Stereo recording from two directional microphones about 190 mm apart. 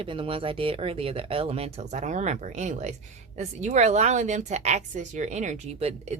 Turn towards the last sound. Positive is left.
turn(degrees=-35)  # may be behind; listen again after turning